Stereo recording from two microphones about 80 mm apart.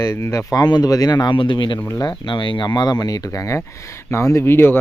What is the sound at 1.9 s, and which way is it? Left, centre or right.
Speech, left.